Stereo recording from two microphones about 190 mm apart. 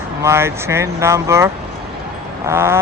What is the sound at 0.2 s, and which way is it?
Speech, 15° right (ahead or behind).